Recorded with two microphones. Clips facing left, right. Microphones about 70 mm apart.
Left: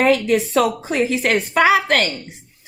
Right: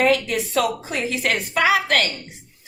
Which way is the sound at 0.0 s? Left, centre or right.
Left.